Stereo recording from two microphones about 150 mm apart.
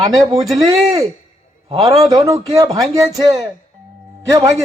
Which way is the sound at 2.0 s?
25° right (ahead or behind).